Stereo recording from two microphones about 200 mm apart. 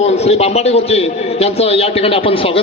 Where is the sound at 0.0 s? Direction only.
30° left (ahead or behind).